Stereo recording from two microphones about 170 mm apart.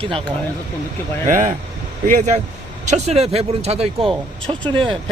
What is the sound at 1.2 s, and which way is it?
Speech, 50° right (ahead or behind).